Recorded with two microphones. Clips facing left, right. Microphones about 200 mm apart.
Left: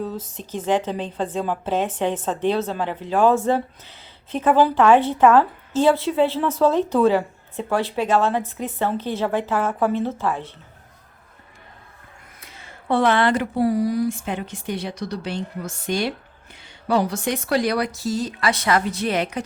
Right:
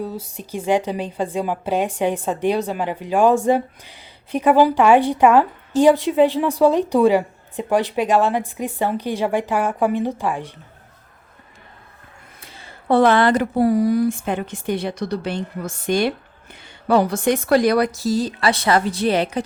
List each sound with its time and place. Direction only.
0.0 s a woman's voice: 10° right (ahead or behind)
12.4 s speech: 30° right (ahead or behind)